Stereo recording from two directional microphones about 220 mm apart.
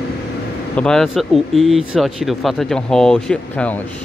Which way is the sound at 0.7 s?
5° left (ahead or behind).